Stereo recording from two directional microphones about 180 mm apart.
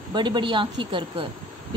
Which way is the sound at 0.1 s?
25° right (ahead or behind).